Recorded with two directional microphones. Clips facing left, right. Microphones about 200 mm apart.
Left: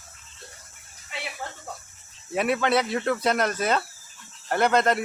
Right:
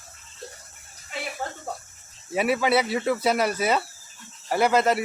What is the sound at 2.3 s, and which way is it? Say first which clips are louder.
Speech: right 1 dB; 5° right (ahead or behind).